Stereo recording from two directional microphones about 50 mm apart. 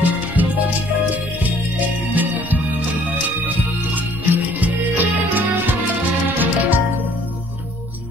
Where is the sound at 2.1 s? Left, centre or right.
Right.